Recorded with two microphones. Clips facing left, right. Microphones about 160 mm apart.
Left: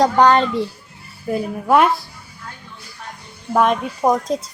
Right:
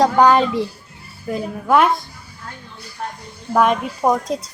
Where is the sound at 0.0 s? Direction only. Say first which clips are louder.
Even; 5° right (ahead or behind).